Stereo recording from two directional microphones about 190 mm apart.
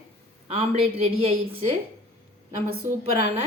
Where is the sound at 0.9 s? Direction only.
30° right (ahead or behind).